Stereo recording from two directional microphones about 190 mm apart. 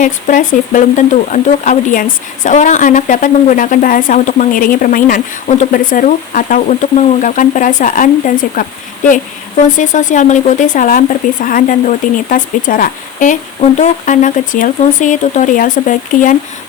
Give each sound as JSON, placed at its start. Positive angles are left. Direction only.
{"t": 0.0, "sound": "speech", "side_deg": 45}